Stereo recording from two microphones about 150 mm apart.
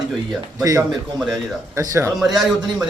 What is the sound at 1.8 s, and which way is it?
Speech, 20° right (ahead or behind).